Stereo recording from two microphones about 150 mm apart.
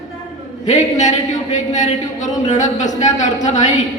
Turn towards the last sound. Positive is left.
turn(degrees=55)  # may be behind; listen again after turning